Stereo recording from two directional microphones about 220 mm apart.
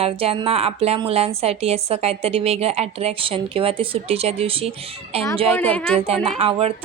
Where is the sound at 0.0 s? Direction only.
25° right (ahead or behind).